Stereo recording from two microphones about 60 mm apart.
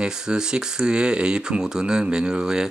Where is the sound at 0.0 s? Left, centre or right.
Centre.